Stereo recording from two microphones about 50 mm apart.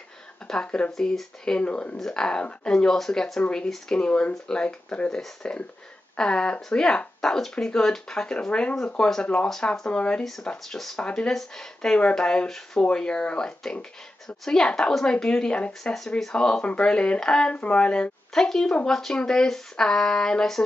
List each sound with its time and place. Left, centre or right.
0.5 s speech: centre
0.9 s speech: centre
2.0 s speech: centre
10.7 s speech: centre
11.0 s speech: left
11.2 s speech: centre